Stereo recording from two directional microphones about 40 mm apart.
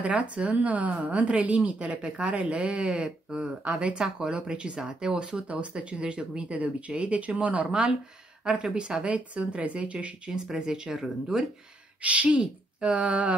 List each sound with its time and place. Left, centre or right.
0.0 s speech: right
2.6 s speech: right
5.5 s speech: right
8.6 s speech: right
10.3 s speech: centre
12.0 s speech: right